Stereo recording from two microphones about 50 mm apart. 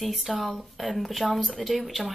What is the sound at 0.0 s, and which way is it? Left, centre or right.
Speech, centre.